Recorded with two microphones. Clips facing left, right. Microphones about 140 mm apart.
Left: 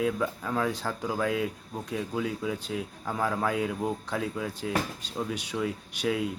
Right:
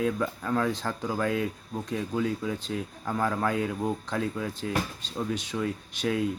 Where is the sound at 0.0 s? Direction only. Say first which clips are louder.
Even; 5° left (ahead or behind).